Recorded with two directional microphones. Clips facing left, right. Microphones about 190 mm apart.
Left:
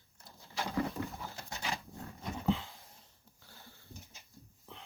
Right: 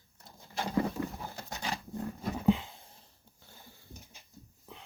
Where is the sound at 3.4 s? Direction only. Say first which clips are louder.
Right 1 dB; 15° right (ahead or behind).